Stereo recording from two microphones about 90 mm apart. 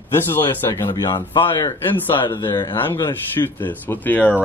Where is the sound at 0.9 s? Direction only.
50° left (ahead or behind).